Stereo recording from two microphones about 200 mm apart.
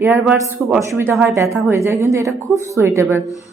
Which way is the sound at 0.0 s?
15° right (ahead or behind).